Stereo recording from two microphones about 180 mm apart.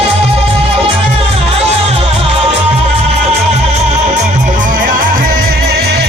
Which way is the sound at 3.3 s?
40° right (ahead or behind).